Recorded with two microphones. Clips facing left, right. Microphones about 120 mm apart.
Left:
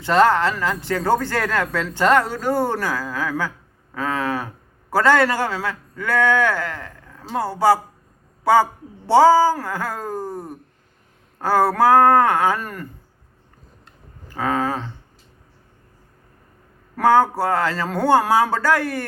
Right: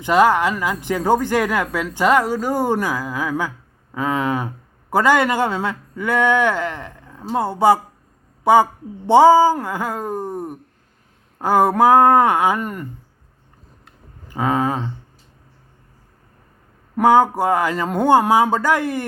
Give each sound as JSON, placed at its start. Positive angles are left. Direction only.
{"t": 0.0, "sound": "a man's voice", "side_deg": -10}
{"t": 13.8, "sound": "a sound", "side_deg": -20}
{"t": 17.0, "sound": "speech", "side_deg": -15}